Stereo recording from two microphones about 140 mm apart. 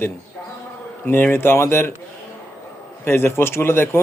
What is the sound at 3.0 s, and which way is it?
Speech, 15° left (ahead or behind).